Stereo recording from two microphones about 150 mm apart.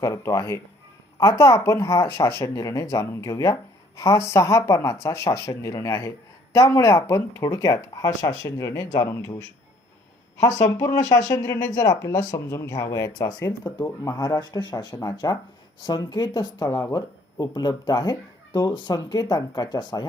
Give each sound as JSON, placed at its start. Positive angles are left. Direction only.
{"t": 0.0, "sound": "speech", "side_deg": 20}
{"t": 10.8, "sound": "speech", "side_deg": 25}